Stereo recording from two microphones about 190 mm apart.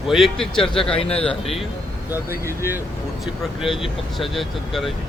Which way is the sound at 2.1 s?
10° right (ahead or behind).